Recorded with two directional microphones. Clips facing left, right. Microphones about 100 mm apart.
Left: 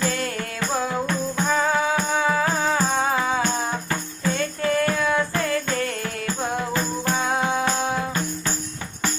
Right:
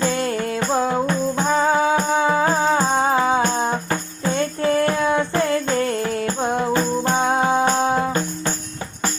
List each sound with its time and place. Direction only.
0.0 s music: 25° right (ahead or behind)